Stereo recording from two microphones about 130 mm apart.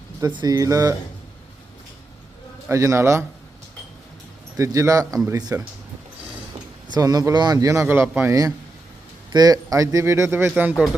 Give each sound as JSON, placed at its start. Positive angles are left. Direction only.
{"t": 0.3, "sound": "speech", "side_deg": -30}
{"t": 2.6, "sound": "speech", "side_deg": -25}
{"t": 4.5, "sound": "speech", "side_deg": -25}
{"t": 6.9, "sound": "speech", "side_deg": -30}
{"t": 8.3, "sound": "speech", "side_deg": -25}